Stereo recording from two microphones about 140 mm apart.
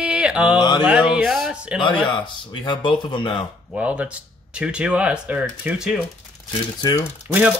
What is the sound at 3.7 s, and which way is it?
Speech, 10° right (ahead or behind).